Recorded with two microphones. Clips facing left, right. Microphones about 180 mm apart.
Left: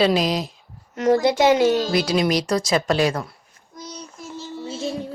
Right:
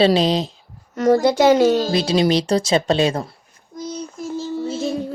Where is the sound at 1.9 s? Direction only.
25° right (ahead or behind).